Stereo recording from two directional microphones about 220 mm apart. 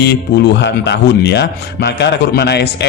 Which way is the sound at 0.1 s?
50° left (ahead or behind).